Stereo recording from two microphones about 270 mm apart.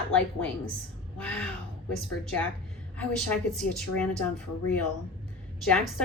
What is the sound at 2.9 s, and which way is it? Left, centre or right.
Speech, centre.